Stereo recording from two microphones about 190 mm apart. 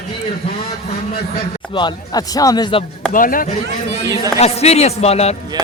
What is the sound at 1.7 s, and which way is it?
Speech, 25° left (ahead or behind).